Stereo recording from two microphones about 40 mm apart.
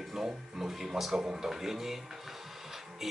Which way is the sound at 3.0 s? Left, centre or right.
Centre.